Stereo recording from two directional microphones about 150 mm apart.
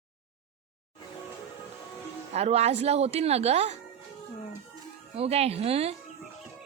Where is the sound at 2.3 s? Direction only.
45° right (ahead or behind).